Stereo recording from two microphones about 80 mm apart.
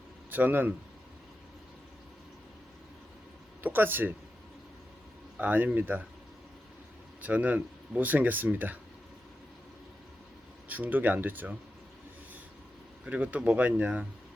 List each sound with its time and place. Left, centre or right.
0.3 s speech: right
3.6 s speech: right
5.4 s speech: right
7.2 s speech: centre
10.7 s speech: right
13.1 s speech: centre